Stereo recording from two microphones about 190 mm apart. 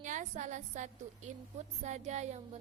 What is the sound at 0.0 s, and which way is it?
A woman's voice, 40° right (ahead or behind).